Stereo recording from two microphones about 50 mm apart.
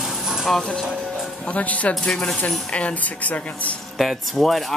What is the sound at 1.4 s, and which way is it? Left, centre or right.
Speech, left.